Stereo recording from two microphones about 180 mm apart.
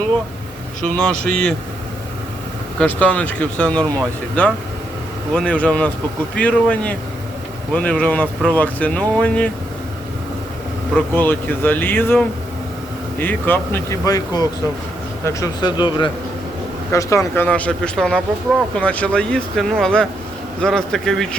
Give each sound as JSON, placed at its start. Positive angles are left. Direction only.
{"t": 0.9, "sound": "speech", "side_deg": 5}
{"t": 2.7, "sound": "speech", "side_deg": 10}
{"t": 10.9, "sound": "speech", "side_deg": 10}